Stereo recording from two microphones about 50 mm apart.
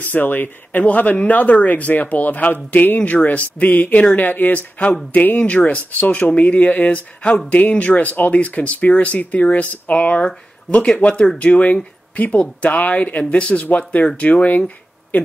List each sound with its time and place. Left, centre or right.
0.0 s speech: left